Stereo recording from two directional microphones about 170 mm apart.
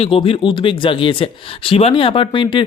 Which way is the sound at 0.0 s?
30° left (ahead or behind).